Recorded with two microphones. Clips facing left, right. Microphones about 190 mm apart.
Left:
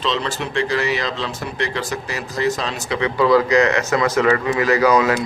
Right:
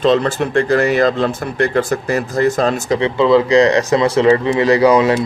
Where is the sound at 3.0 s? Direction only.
25° right (ahead or behind).